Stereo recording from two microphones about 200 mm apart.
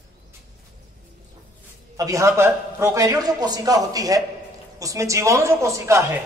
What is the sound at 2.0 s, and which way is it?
A man's voice, 15° right (ahead or behind).